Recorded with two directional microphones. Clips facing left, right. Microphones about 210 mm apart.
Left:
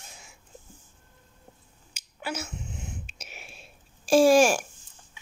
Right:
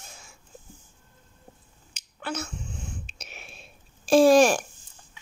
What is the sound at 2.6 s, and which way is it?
Throat clearing, 20° left (ahead or behind).